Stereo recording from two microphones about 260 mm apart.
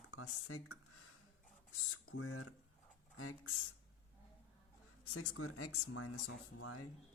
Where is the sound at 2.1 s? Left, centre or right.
Left.